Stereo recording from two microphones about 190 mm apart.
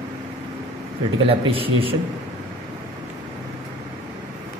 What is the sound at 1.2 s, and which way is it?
Speech, 30° right (ahead or behind).